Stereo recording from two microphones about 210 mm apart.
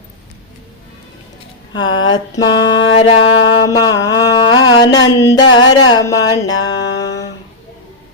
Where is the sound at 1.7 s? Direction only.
20° left (ahead or behind).